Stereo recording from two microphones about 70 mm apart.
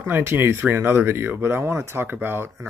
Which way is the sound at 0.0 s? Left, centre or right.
Right.